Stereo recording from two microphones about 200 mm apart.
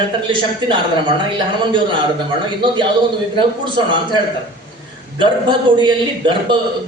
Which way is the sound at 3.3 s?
25° right (ahead or behind).